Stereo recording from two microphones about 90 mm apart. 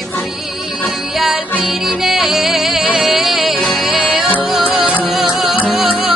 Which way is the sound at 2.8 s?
15° right (ahead or behind).